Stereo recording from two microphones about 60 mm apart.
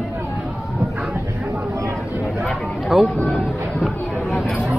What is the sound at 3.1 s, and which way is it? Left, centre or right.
Speech, centre.